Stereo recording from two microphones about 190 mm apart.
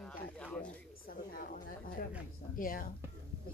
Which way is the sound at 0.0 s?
5° left (ahead or behind).